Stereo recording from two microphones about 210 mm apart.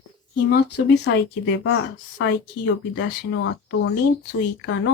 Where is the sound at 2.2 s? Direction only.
55° left (ahead or behind).